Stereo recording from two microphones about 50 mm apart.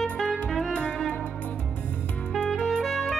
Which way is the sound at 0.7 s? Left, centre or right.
Centre.